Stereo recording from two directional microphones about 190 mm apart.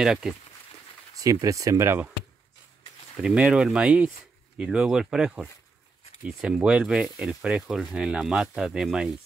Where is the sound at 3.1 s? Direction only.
5° right (ahead or behind).